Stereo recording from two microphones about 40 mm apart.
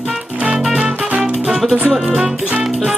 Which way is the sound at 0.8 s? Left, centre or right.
Right.